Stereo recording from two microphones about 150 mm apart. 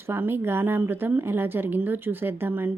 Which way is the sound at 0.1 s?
15° right (ahead or behind).